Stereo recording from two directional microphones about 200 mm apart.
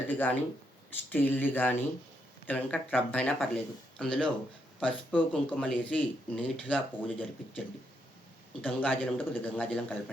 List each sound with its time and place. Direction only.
0.1 s speech: 10° left (ahead or behind)
8.6 s speech: 5° left (ahead or behind)